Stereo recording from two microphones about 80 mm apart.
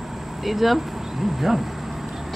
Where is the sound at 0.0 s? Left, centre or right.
Centre.